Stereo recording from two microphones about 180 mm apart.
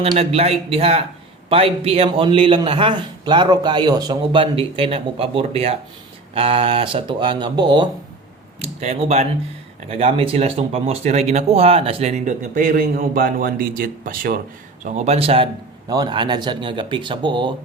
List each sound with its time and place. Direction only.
0.2 s speech: 35° right (ahead or behind)
8.6 s speech: 35° right (ahead or behind); by 14.4 s 55° right (ahead or behind)
14.8 s speech: 40° right (ahead or behind)